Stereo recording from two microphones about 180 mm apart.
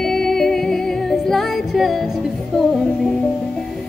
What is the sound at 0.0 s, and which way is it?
Music, centre (ahead or behind).